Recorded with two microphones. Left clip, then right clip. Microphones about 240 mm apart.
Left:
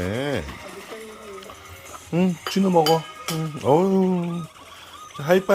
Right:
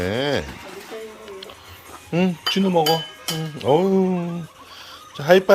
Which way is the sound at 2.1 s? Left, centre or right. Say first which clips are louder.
Right 3 dB; centre.